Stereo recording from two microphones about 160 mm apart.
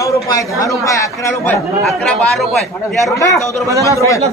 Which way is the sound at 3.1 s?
20° left (ahead or behind).